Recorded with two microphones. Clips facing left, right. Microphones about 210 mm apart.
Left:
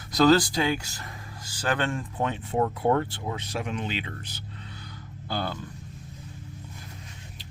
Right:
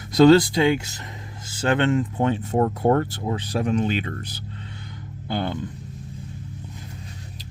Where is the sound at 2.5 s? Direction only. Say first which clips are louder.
Right 2 dB; 45° right (ahead or behind).